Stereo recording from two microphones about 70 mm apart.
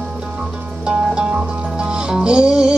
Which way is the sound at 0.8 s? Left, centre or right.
Centre.